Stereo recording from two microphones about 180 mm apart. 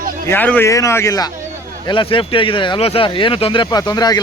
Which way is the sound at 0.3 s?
10° left (ahead or behind).